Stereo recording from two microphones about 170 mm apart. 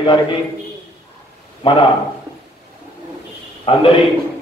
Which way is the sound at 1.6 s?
35° left (ahead or behind).